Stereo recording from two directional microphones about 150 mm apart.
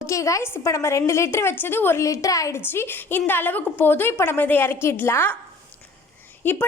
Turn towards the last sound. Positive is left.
turn(degrees=15)  # may be behind; listen again after turning